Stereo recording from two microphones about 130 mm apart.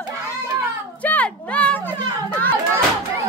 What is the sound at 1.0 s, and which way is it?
Children playing, 10° left (ahead or behind).